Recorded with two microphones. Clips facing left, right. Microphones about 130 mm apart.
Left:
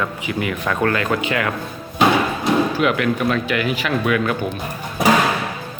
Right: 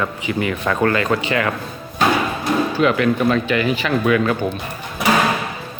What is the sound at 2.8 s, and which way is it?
Speech, 5° left (ahead or behind).